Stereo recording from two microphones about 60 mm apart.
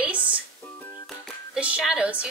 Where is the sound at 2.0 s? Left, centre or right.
Right.